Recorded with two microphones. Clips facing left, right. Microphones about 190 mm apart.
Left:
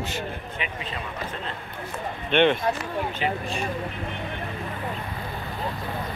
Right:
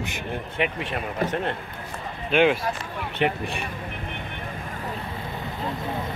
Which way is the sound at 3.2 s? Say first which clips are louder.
Right 2 dB; 60° right (ahead or behind).